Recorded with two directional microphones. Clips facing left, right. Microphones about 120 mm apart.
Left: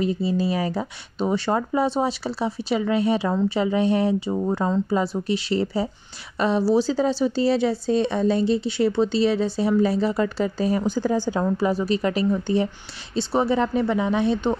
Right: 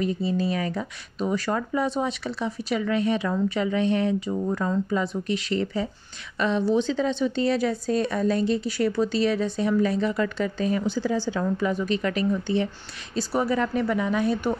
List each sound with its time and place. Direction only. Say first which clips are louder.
0.0 s speech: left 2 dB; 30° left (ahead or behind)